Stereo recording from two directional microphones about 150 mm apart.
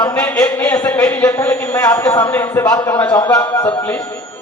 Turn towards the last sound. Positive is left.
turn(degrees=25)  # may be behind; listen again after turning